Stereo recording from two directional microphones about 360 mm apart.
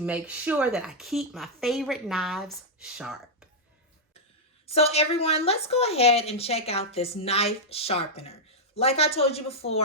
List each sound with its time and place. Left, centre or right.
0.0 s speech: centre
4.6 s a woman's voice: centre